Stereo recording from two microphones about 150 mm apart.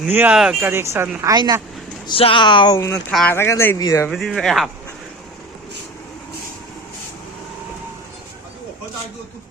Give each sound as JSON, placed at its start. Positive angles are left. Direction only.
{"t": 0.0, "sound": "a woman's voice", "side_deg": -10}
{"t": 0.7, "sound": "a woman's voice", "side_deg": -15}
{"t": 1.3, "sound": "speech", "side_deg": -25}
{"t": 2.0, "sound": "speech", "side_deg": 35}
{"t": 2.7, "sound": "speech", "side_deg": 20}
{"t": 3.1, "sound": "speech", "side_deg": 0}
{"t": 3.3, "sound": "speech", "side_deg": 15}
{"t": 4.1, "sound": "speech", "side_deg": 0}